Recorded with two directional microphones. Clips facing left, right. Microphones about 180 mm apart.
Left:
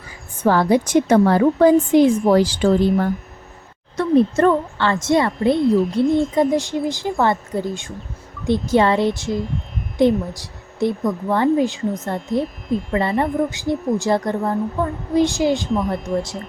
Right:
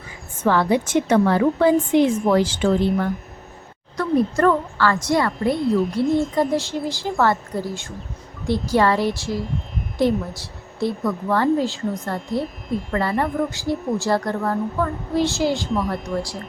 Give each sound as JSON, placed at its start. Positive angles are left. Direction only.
{"t": 0.4, "sound": "a woman's voice", "side_deg": 40}
{"t": 3.9, "sound": "a woman's voice", "side_deg": 25}
{"t": 5.6, "sound": "speech", "side_deg": 0}
{"t": 6.5, "sound": "a woman's voice", "side_deg": 15}
{"t": 15.7, "sound": "speech", "side_deg": 0}